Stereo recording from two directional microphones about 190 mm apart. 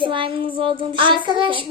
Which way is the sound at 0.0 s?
25° right (ahead or behind).